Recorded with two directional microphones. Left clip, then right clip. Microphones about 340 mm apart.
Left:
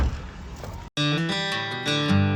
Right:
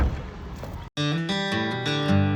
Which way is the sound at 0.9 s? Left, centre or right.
Centre.